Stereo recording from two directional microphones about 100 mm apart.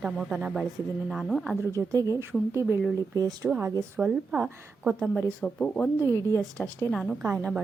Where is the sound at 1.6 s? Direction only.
30° right (ahead or behind).